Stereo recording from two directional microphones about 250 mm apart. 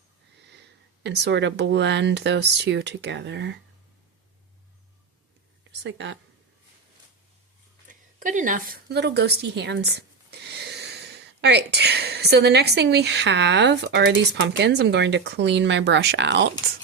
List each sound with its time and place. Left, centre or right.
1.0 s speech: right
5.8 s speech: right
7.9 s a woman's voice: right